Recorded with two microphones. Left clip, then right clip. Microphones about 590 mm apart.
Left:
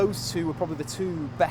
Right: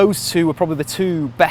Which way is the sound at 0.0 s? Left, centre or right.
Right.